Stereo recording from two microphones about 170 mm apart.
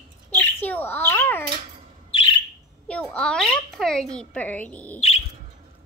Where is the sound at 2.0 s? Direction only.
30° left (ahead or behind).